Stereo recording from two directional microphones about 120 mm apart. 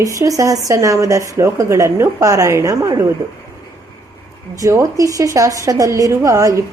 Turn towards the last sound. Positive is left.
turn(degrees=-25)  # may be behind; listen again after turning